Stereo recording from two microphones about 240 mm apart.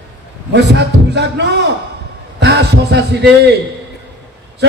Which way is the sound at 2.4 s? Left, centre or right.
Right.